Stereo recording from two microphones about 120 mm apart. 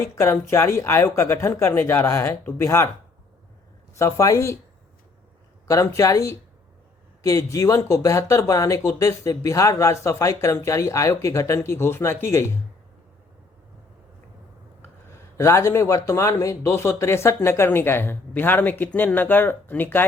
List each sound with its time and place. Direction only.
0.0 s speech: 20° left (ahead or behind)
3.9 s speech: 25° left (ahead or behind)
5.6 s speech: 25° left (ahead or behind)
15.4 s speech: 25° left (ahead or behind)